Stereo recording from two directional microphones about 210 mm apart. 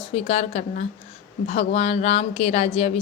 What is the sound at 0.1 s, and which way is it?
A woman's voice, 30° left (ahead or behind).